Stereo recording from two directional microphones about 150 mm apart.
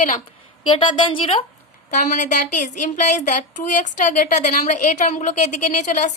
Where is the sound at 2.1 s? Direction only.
55° left (ahead or behind).